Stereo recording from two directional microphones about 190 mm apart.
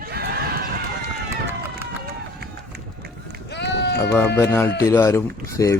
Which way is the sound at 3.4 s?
65° left (ahead or behind).